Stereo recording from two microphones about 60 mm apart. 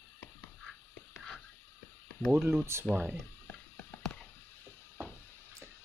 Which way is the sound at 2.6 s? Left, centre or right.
Right.